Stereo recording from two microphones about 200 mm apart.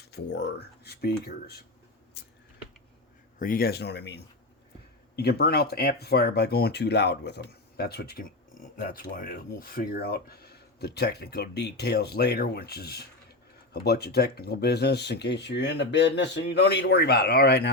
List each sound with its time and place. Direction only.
0.0 s speech: 55° left (ahead or behind)
2.2 s a sound: 55° left (ahead or behind)
3.3 s speech: 45° left (ahead or behind)